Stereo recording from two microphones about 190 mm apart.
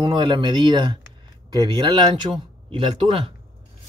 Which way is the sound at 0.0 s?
25° right (ahead or behind).